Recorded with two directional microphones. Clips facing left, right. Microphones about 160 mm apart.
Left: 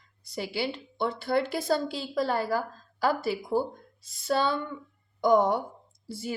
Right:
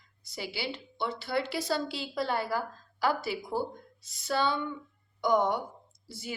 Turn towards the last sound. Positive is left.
turn(degrees=50)  # may be behind; listen again after turning